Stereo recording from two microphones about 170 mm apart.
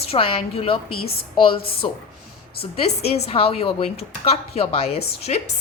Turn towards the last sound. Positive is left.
turn(degrees=35)  # may be behind; listen again after turning